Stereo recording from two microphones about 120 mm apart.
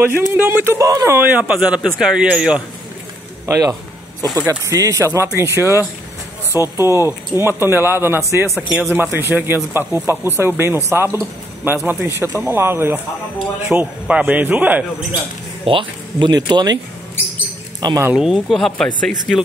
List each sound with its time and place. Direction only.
0.3 s a man's voice: 15° right (ahead or behind)
3.4 s a man's voice: 25° right (ahead or behind)
15.6 s speech: 45° right (ahead or behind)
17.7 s speech: 35° right (ahead or behind)
18.1 s speech: 5° right (ahead or behind)